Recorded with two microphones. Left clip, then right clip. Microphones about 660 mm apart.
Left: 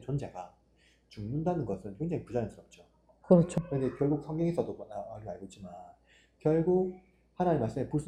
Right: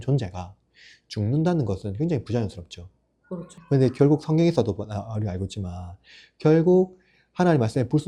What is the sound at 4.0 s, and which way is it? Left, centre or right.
Speech, right.